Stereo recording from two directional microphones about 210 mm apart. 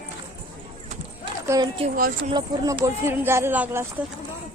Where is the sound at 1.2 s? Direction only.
20° right (ahead or behind).